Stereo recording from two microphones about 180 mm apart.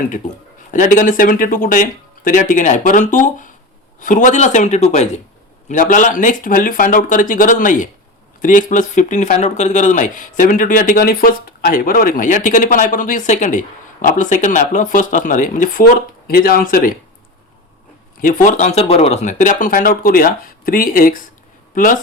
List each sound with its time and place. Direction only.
0.7 s a man's voice: 45° left (ahead or behind)
18.2 s speech: 45° left (ahead or behind)